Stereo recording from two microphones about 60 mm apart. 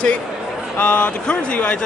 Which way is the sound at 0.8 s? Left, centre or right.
Left.